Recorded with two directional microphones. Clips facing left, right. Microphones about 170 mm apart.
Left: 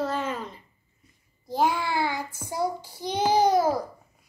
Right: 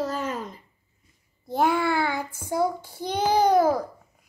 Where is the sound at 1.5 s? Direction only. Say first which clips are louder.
Right 2 dB; 60° right (ahead or behind).